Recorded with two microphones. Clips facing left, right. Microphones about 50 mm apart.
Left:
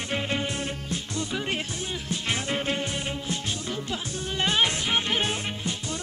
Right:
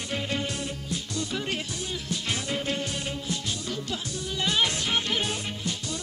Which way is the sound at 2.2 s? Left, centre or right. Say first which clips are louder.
Left 3 dB; left.